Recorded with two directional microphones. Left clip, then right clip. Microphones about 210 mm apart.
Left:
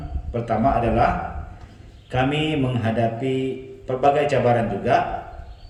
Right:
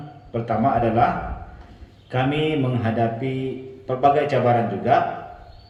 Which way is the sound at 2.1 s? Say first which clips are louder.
Even; 50° left (ahead or behind).